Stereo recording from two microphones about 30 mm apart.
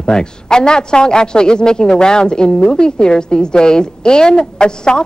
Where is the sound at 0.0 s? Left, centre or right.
Left.